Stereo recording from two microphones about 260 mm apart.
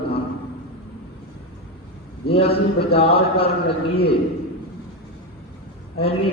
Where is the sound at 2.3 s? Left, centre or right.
Left.